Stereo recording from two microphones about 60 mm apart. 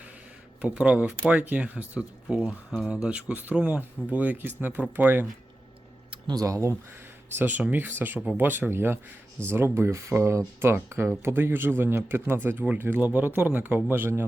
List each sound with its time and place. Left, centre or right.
0.6 s speech: centre
6.3 s speech: right
7.3 s speech: right